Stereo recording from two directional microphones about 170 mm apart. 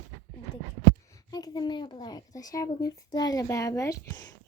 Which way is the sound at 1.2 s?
25° left (ahead or behind).